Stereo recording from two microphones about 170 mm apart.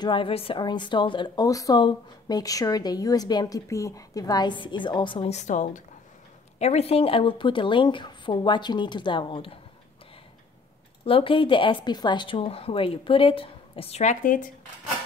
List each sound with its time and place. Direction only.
0.0 s a woman's voice: 30° left (ahead or behind)
5.3 s a woman's voice: 45° left (ahead or behind)
11.1 s a woman's voice: 30° left (ahead or behind); by 14.5 s 50° left (ahead or behind)